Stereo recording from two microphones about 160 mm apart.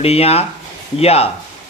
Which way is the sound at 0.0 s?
40° left (ahead or behind).